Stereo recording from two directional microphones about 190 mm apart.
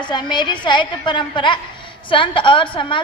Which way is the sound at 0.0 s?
25° left (ahead or behind).